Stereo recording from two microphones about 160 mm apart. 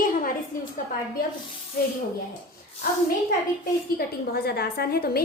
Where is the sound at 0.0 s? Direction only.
60° left (ahead or behind).